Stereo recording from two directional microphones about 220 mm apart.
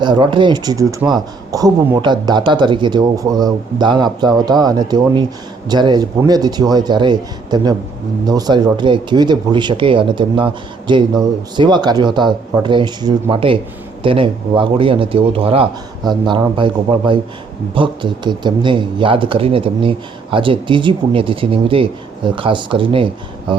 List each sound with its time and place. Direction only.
0.0 s a man's voice: 20° right (ahead or behind)